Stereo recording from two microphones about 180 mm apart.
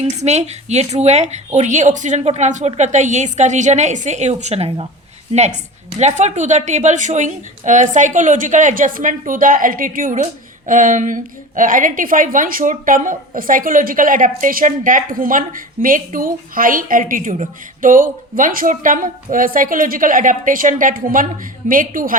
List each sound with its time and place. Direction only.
0.0 s a woman's voice: 40° right (ahead or behind)